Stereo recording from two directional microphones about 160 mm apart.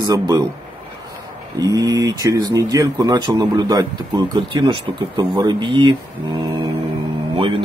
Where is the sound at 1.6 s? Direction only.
20° right (ahead or behind).